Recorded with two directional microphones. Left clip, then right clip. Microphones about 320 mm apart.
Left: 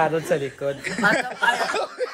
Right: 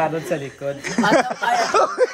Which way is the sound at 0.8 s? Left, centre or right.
Right.